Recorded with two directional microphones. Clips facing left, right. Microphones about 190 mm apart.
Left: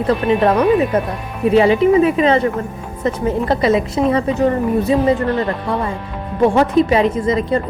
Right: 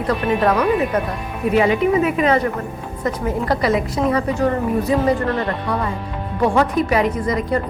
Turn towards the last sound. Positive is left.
turn(degrees=25)  # may be behind; listen again after turning